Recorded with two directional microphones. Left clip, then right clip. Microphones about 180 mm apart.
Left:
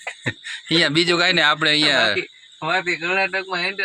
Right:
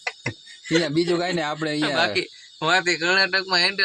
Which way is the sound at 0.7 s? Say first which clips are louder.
Left 4 dB; 10° right (ahead or behind).